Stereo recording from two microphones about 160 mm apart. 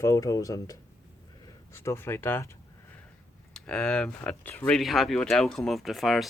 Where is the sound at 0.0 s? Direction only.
20° left (ahead or behind).